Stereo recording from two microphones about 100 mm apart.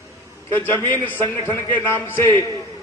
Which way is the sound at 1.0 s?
20° left (ahead or behind).